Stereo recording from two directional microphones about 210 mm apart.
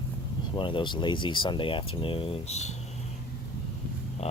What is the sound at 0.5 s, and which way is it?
Speech, 25° left (ahead or behind).